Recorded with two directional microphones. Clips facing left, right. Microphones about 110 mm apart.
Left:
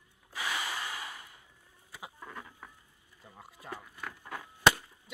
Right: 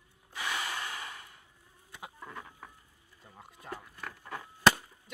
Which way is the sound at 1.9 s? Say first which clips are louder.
Even; centre (ahead or behind).